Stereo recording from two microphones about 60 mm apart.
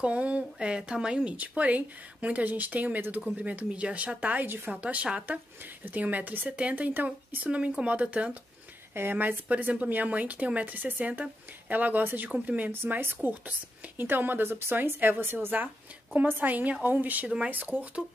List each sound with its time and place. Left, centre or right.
0.0 s a woman's voice: right
8.9 s a woman's voice: right
9.5 s a woman's voice: right
12.7 s a woman's voice: right